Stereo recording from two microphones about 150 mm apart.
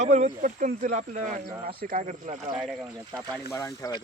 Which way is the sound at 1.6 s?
75° right (ahead or behind).